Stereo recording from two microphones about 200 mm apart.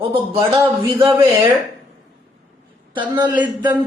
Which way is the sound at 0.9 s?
25° right (ahead or behind).